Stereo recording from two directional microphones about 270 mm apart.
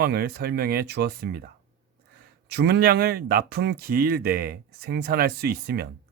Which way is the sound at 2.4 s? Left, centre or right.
Right.